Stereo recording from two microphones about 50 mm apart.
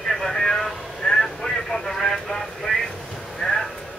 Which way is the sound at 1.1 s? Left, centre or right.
Centre.